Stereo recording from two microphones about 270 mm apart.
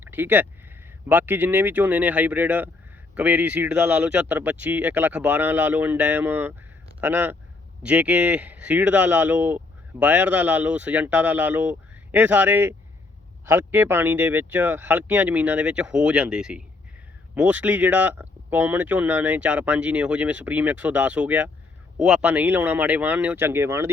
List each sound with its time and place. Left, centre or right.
0.0 s speech: centre